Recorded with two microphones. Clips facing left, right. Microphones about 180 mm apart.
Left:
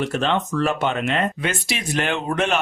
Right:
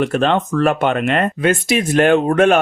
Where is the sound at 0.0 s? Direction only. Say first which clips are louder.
Right 6 dB; 55° right (ahead or behind).